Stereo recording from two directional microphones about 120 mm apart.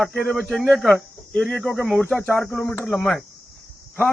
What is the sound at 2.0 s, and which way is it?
Speech, 15° left (ahead or behind).